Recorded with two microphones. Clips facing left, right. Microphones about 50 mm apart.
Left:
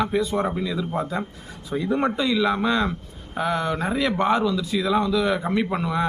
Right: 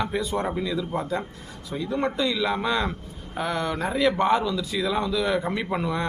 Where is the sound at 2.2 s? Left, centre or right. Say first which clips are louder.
Left 3 dB; centre.